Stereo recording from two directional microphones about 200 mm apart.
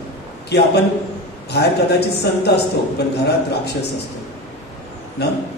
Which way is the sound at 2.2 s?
55° left (ahead or behind).